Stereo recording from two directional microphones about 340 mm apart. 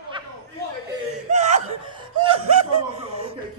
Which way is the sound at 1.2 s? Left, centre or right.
Right.